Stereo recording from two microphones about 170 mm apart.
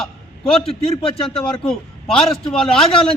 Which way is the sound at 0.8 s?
35° left (ahead or behind).